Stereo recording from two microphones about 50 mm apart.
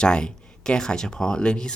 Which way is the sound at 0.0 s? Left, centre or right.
Centre.